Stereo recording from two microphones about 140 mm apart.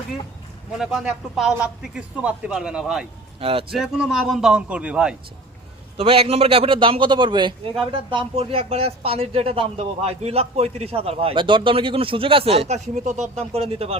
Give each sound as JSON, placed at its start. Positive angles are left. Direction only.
{"t": 0.8, "sound": "a man's voice", "side_deg": -5}
{"t": 3.4, "sound": "speech", "side_deg": -45}
{"t": 3.8, "sound": "a man's voice", "side_deg": -5}
{"t": 6.0, "sound": "a man's voice", "side_deg": -45}